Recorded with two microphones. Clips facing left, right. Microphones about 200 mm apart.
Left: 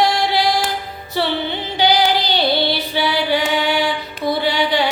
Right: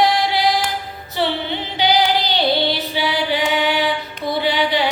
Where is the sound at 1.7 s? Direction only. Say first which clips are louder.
Left 1 dB; 20° right (ahead or behind).